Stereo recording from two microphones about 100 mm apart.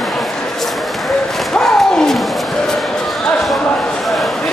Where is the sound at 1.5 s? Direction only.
5° left (ahead or behind).